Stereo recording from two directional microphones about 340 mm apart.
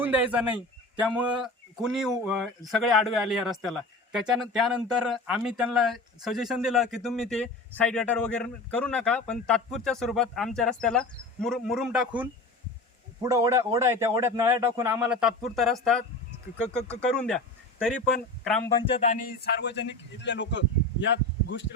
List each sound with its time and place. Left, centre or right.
0.0 s a man's voice: centre
18.9 s speech: left